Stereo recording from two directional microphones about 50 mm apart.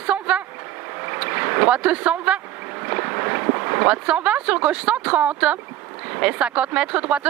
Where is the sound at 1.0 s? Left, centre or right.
Right.